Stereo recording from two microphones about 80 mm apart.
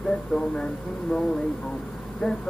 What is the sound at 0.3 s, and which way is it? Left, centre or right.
Speech, centre.